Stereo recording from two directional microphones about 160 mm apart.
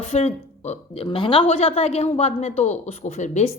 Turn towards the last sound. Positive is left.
turn(degrees=45)  # may be behind; listen again after turning